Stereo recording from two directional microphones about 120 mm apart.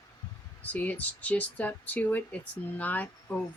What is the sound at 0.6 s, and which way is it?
Speech, 15° left (ahead or behind).